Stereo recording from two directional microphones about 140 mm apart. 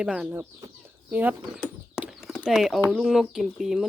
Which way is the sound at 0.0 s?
10° right (ahead or behind).